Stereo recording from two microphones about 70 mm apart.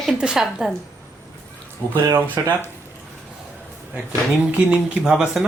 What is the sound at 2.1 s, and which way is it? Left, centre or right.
Speech, right.